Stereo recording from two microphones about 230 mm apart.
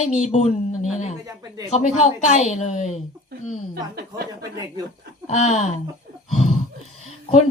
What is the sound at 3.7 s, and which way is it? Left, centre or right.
Speech, right.